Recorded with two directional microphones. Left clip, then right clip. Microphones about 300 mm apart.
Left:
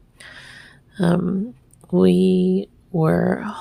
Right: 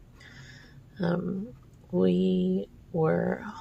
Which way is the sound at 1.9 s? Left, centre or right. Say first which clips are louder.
Left 9 dB; left.